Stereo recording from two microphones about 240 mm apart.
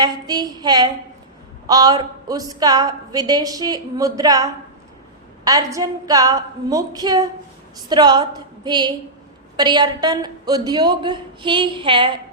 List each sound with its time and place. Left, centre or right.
0.0 s a woman's voice: centre
5.5 s a woman's voice: centre